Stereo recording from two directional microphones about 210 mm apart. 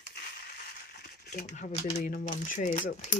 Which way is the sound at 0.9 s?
50° left (ahead or behind).